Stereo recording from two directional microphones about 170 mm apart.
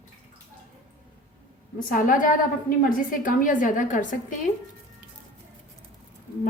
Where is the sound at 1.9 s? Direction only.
55° left (ahead or behind).